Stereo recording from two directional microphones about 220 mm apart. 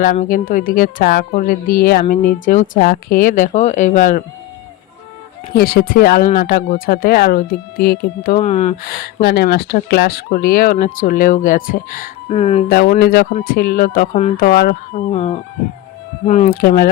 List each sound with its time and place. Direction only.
0.0 s speech: 35° left (ahead or behind)
5.5 s speech: 45° left (ahead or behind)
8.4 s speech: 30° left (ahead or behind)
9.2 s speech: 45° left (ahead or behind)
12.3 s speech: 30° left (ahead or behind)
12.6 s speech: 40° left (ahead or behind)
14.9 s speech: 30° left (ahead or behind)
16.6 s speech: 45° left (ahead or behind)